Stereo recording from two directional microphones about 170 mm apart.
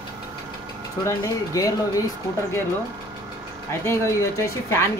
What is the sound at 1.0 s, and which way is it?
Speech, 20° left (ahead or behind).